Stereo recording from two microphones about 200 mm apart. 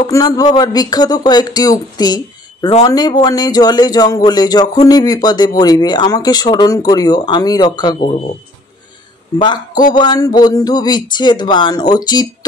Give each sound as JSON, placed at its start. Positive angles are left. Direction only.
{"t": 0.0, "sound": "speech", "side_deg": 20}
{"t": 9.9, "sound": "speech", "side_deg": 20}